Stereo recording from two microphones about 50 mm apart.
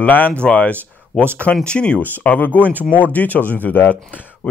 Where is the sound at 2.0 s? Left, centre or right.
Left.